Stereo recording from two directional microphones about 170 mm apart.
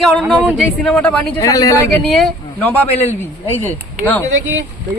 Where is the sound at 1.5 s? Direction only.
20° left (ahead or behind).